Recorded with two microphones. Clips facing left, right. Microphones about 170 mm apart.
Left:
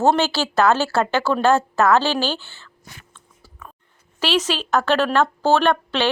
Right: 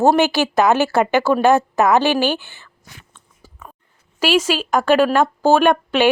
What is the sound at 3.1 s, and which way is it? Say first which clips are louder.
Biting: right 1 dB; 15° right (ahead or behind).